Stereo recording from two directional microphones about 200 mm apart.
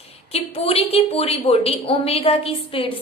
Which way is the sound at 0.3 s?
30° left (ahead or behind).